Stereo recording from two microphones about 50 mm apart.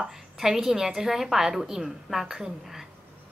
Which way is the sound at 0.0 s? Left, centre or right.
Centre.